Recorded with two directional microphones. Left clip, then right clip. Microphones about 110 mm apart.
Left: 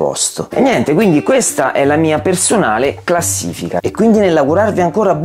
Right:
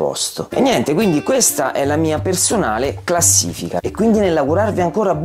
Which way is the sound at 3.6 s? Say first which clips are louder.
Left 4 dB; 30° left (ahead or behind).